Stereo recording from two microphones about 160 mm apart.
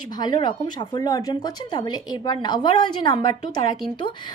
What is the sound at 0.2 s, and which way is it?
Speech, 25° left (ahead or behind).